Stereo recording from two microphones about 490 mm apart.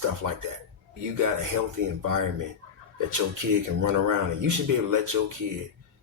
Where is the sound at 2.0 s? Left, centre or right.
Right.